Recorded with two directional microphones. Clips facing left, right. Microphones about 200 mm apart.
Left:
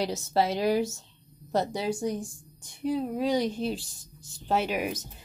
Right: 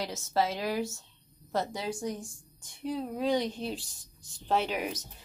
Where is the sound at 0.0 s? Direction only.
30° left (ahead or behind).